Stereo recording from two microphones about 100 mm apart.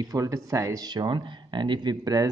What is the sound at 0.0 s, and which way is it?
Speech, 35° right (ahead or behind).